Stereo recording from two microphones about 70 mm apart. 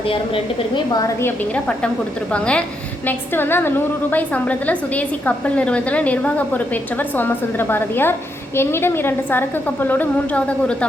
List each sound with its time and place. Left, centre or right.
1.5 s a woman's voice: centre
3.1 s a woman's voice: left
4.4 s a woman's voice: left